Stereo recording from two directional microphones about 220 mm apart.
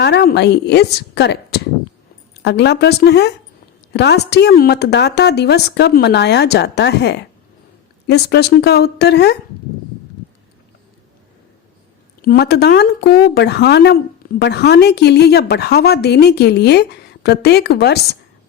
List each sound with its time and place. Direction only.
0.0 s a woman's voice: 50° left (ahead or behind)
12.2 s a woman's voice: 45° left (ahead or behind)